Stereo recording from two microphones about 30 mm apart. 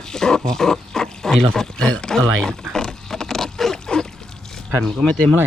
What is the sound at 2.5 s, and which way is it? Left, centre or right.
Pig, centre.